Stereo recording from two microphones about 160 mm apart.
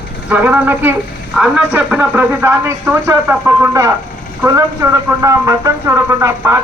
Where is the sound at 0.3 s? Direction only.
10° right (ahead or behind).